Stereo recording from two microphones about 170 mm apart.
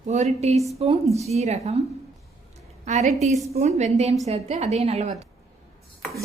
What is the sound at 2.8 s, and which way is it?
A woman's voice, 45° right (ahead or behind).